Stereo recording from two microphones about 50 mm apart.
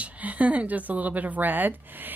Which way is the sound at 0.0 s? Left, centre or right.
Right.